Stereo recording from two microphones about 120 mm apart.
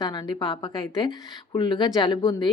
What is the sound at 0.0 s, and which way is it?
A woman's voice, 35° left (ahead or behind).